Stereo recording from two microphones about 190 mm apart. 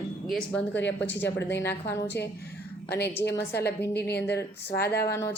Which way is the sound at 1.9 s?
60° left (ahead or behind).